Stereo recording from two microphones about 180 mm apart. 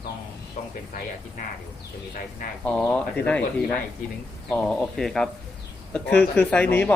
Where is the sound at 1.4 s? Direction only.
45° left (ahead or behind).